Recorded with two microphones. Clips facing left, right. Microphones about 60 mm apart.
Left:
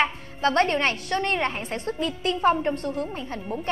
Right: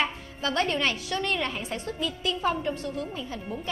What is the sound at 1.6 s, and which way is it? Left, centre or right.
A woman's voice, left.